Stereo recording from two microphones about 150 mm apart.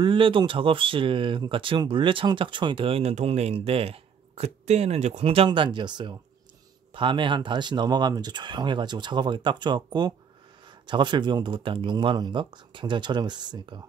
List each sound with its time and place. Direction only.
0.0 s speech: 35° right (ahead or behind)